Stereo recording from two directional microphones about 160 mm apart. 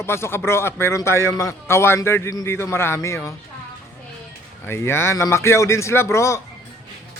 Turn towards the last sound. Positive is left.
turn(degrees=15)  # may be behind; listen again after turning